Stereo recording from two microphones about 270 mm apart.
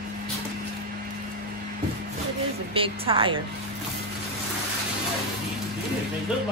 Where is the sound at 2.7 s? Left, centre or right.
Centre.